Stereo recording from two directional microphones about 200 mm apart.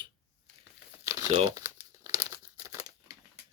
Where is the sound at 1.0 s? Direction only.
15° right (ahead or behind).